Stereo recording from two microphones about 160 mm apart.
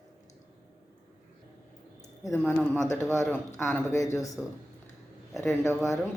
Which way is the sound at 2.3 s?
10° left (ahead or behind).